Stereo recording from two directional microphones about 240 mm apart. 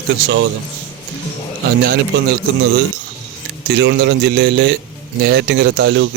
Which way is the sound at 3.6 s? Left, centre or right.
Right.